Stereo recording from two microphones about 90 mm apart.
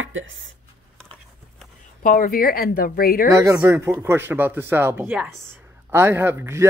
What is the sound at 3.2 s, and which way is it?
A man's voice, 40° right (ahead or behind).